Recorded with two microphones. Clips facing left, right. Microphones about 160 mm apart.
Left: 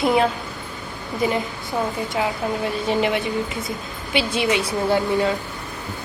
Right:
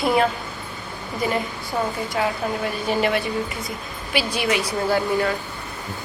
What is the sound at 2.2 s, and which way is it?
A woman's voice, 15° left (ahead or behind).